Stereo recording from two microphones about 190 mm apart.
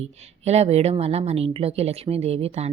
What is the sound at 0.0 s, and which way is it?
A woman's voice, 35° right (ahead or behind).